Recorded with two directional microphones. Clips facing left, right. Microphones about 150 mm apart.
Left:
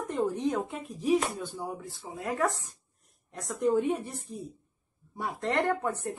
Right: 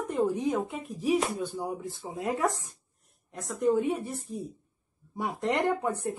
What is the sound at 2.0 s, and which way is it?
Speech, 20° right (ahead or behind).